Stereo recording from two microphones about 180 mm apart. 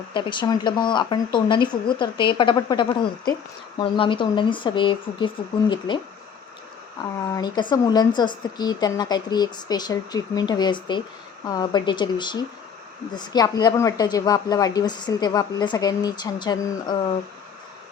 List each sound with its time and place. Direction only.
0.1 s a woman's voice: 25° left (ahead or behind)
7.3 s a woman's voice: 25° left (ahead or behind)